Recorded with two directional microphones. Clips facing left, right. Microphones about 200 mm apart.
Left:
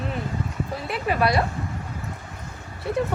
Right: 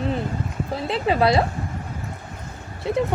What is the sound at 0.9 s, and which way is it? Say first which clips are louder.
Speech: right 4 dB; 25° right (ahead or behind).